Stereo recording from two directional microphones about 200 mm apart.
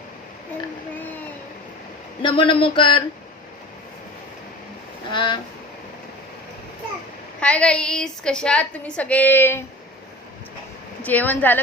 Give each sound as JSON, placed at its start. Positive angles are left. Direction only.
{"t": 2.2, "sound": "speech", "side_deg": 25}
{"t": 5.1, "sound": "speech", "side_deg": 25}
{"t": 7.4, "sound": "a woman's voice", "side_deg": 5}
{"t": 11.0, "sound": "a woman's voice", "side_deg": 10}